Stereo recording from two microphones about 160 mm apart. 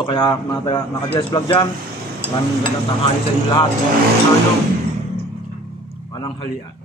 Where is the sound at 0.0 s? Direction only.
30° left (ahead or behind).